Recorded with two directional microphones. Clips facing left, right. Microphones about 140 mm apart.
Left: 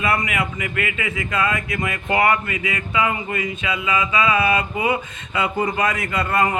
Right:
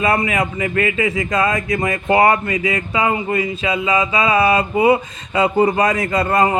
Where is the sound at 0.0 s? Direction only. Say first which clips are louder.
Right 5 dB; 35° right (ahead or behind).